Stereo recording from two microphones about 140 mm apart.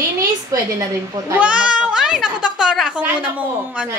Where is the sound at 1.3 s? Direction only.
10° right (ahead or behind).